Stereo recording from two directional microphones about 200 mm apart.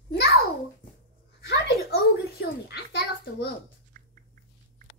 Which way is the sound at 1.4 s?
55° left (ahead or behind).